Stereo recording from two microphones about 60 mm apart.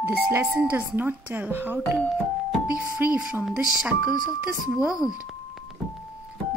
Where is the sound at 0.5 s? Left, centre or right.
Right.